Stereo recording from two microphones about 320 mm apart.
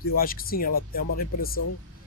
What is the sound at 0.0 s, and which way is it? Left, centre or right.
Speech, left.